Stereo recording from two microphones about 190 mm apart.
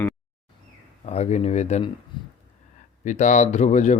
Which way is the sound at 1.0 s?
35° left (ahead or behind).